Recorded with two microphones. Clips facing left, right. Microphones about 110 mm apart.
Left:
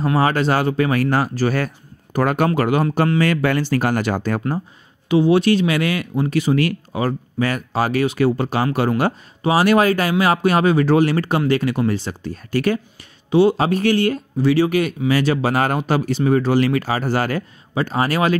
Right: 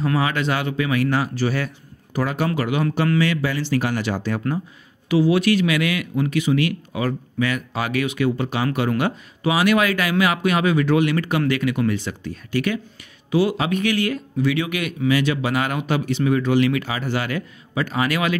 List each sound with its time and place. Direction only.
0.0 s speech: 35° left (ahead or behind)
5.0 s speech: 25° left (ahead or behind)
13.3 s speech: 30° left (ahead or behind)